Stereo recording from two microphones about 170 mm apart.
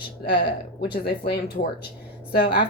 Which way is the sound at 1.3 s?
70° left (ahead or behind).